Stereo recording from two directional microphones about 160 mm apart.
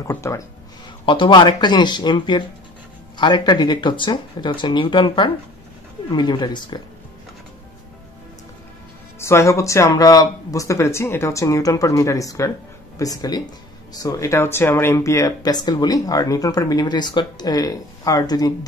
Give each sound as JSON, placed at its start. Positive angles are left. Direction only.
{"t": 0.0, "sound": "speech", "side_deg": 15}
{"t": 1.0, "sound": "speech", "side_deg": 30}
{"t": 9.2, "sound": "speech", "side_deg": 20}